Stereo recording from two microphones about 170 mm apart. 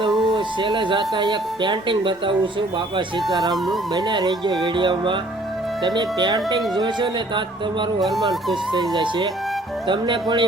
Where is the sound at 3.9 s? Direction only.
25° right (ahead or behind).